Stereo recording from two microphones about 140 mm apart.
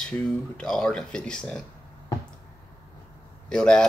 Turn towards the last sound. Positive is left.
turn(degrees=5)  # may be behind; listen again after turning